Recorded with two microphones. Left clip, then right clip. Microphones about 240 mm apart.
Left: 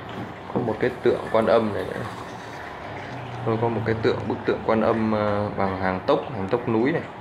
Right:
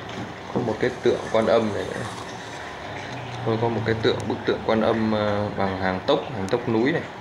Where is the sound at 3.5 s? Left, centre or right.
Left.